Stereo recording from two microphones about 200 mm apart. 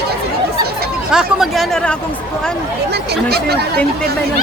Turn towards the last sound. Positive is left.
turn(degrees=-50)  # may be behind; listen again after turning